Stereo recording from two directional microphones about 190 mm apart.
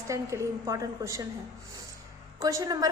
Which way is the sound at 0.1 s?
15° right (ahead or behind).